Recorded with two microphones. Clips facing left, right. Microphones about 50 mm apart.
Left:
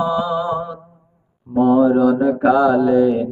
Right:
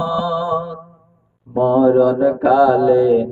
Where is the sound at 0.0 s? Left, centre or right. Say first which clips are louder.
Even; left.